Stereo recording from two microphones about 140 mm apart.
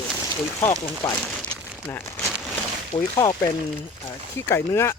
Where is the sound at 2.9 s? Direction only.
60° left (ahead or behind).